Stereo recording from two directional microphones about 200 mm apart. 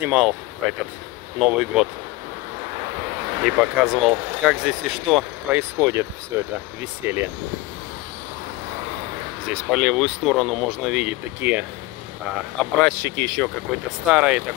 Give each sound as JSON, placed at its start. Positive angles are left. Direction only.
{"t": 0.0, "sound": "speech", "side_deg": -5}
{"t": 3.4, "sound": "speech", "side_deg": 0}
{"t": 5.6, "sound": "speech", "side_deg": -15}
{"t": 9.5, "sound": "speech", "side_deg": -5}
{"t": 12.8, "sound": "speech", "side_deg": 10}